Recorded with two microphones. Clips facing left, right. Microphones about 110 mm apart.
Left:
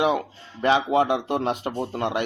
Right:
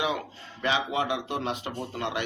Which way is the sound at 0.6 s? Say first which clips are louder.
Left 8 dB; 45° left (ahead or behind).